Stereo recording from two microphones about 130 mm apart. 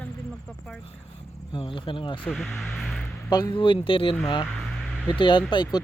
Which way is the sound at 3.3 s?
30° left (ahead or behind).